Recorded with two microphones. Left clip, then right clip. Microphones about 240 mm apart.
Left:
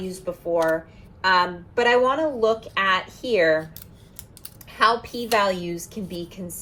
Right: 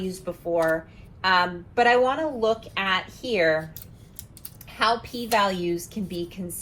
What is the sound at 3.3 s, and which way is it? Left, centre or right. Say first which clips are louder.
Speech: left 3 dB; left.